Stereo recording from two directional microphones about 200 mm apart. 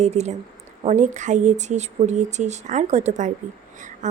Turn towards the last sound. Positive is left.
turn(degrees=-35)  # may be behind; listen again after turning